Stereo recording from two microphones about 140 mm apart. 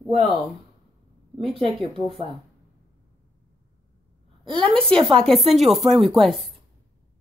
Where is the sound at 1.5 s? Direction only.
40° right (ahead or behind).